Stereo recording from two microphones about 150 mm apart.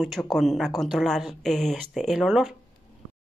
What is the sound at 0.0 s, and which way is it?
Speech, centre (ahead or behind).